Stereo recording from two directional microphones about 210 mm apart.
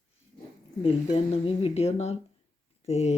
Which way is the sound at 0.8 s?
30° left (ahead or behind).